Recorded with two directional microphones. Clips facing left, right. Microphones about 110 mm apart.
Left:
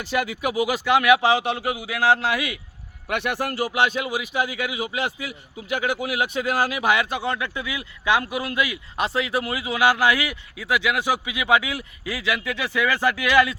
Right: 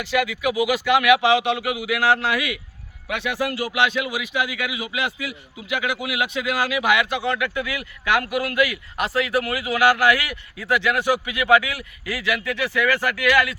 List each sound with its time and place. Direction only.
0.1 s speech: 40° left (ahead or behind)
3.1 s a man's voice: 55° left (ahead or behind); by 13.6 s 25° left (ahead or behind)